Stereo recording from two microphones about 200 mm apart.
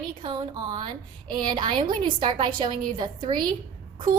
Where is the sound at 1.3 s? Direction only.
20° right (ahead or behind).